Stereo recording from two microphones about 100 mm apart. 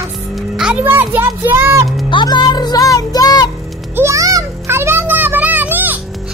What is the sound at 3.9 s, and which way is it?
Music, 30° right (ahead or behind).